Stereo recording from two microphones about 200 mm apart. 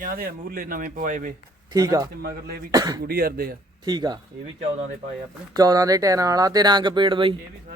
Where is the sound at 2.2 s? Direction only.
50° right (ahead or behind).